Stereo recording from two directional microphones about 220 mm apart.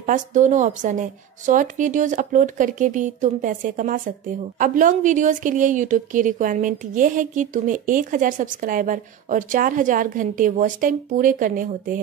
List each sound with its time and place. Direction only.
0.0 s a woman's voice: 35° right (ahead or behind)